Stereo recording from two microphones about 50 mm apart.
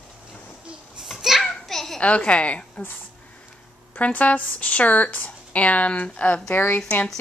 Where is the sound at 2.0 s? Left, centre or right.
Left.